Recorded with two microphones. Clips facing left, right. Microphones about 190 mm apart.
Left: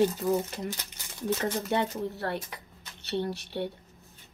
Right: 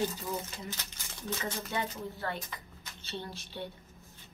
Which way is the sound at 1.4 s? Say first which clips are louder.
Left 6 dB; 65° left (ahead or behind).